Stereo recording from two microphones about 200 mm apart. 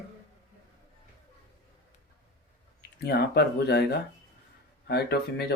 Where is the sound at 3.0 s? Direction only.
55° left (ahead or behind).